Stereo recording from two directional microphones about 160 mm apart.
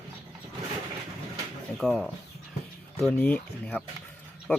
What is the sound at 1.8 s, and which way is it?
Speech, 5° left (ahead or behind).